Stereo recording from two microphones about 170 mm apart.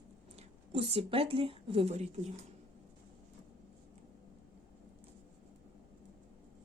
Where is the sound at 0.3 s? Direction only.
40° right (ahead or behind).